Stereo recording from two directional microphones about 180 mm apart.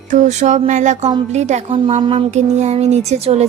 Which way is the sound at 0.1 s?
40° right (ahead or behind).